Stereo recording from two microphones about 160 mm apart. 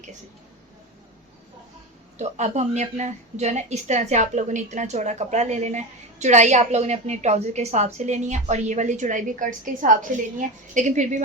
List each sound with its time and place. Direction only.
2.1 s a woman's voice: 45° right (ahead or behind)